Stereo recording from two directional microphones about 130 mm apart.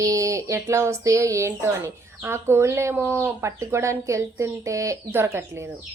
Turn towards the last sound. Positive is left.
turn(degrees=-20)  # may be behind; listen again after turning